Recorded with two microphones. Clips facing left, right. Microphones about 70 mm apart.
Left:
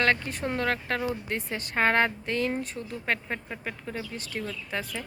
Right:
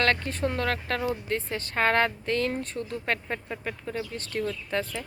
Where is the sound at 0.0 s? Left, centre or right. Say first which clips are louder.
Even; centre.